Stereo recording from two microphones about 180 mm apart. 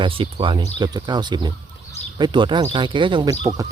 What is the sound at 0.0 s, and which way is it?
Speech, 30° right (ahead or behind).